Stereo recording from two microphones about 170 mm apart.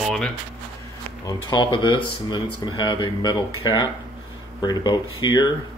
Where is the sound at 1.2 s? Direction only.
20° left (ahead or behind).